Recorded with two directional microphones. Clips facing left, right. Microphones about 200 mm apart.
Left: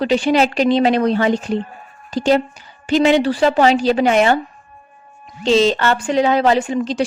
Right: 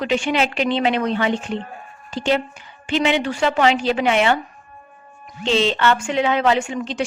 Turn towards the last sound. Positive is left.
turn(degrees=35)  # may be behind; listen again after turning